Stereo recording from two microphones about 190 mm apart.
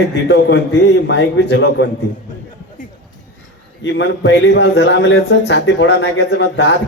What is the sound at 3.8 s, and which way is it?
Speech, 70° left (ahead or behind).